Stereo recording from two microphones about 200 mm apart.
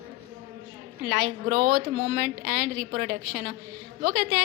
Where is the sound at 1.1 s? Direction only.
55° right (ahead or behind).